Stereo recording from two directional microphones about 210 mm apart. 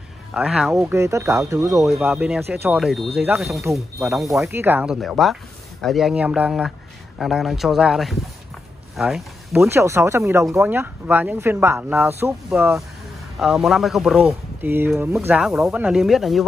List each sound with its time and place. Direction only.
0.3 s speech: 5° right (ahead or behind)
0.9 s speech: 15° right (ahead or behind)
1.9 s speech: centre (ahead or behind)
9.6 s speech: 15° right (ahead or behind)